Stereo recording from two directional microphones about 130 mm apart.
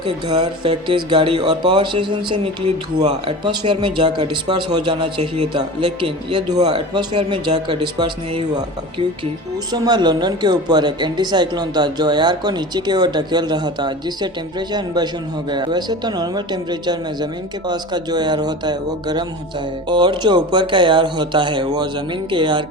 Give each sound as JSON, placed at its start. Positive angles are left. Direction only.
{"t": 0.0, "sound": "speech", "side_deg": -35}
{"t": 6.5, "sound": "speech", "side_deg": -30}